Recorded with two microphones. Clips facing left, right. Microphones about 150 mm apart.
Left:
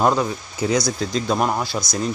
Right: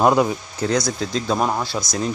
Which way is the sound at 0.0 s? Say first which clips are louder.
Right 3 dB; 15° right (ahead or behind).